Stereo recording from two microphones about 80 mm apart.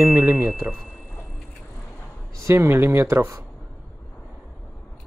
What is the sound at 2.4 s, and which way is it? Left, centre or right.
Speech, right.